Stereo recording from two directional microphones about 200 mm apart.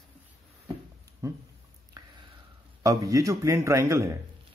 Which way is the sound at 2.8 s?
15° right (ahead or behind).